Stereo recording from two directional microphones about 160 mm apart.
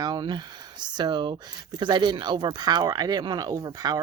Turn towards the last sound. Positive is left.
turn(degrees=-25)  # may be behind; listen again after turning